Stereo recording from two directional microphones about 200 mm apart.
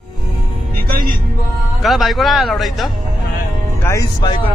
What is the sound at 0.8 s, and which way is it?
Music, 50° right (ahead or behind).